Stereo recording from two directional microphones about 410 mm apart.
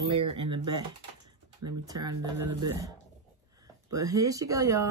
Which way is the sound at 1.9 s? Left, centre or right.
Centre.